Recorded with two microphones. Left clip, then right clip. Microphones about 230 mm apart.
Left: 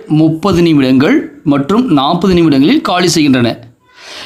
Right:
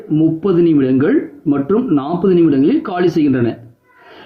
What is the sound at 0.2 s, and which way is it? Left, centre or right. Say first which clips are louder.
Speech: left 2 dB; left.